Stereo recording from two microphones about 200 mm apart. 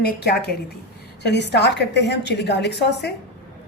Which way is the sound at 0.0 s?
55° left (ahead or behind).